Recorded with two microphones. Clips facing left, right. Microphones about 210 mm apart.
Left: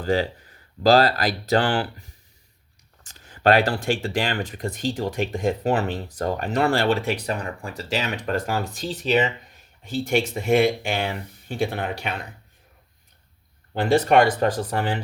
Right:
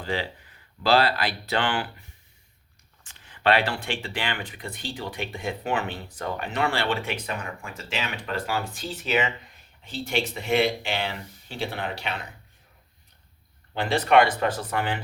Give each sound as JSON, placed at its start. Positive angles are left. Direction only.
{"t": 0.0, "sound": "speech", "side_deg": 40}
{"t": 9.8, "sound": "speech", "side_deg": 45}
{"t": 13.7, "sound": "speech", "side_deg": 45}